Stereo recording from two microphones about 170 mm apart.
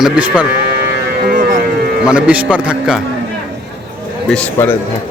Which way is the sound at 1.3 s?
55° right (ahead or behind).